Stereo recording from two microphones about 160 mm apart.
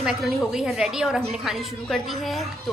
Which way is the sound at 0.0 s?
Centre (ahead or behind).